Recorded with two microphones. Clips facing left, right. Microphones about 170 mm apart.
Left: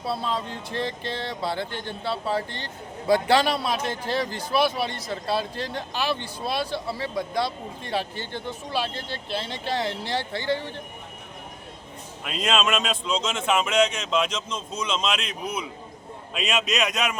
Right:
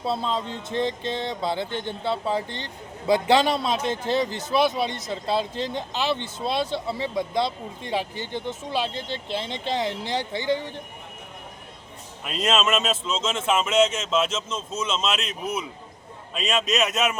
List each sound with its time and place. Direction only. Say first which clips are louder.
0.0 s a man's voice: right 2 dB; 20° right (ahead or behind)
12.2 s speech: right 1 dB; centre (ahead or behind)